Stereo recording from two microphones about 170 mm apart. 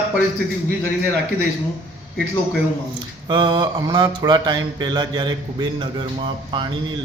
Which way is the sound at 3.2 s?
25° right (ahead or behind).